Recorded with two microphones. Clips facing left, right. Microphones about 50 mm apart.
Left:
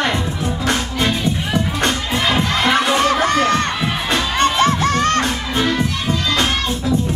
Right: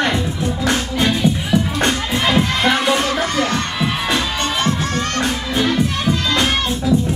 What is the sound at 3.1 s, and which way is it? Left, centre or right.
Crowd, left.